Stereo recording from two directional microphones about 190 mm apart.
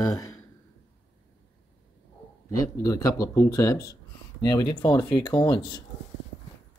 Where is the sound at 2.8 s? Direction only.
15° left (ahead or behind).